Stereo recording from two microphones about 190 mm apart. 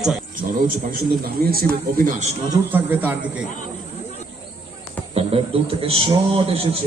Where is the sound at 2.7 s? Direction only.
10° right (ahead or behind).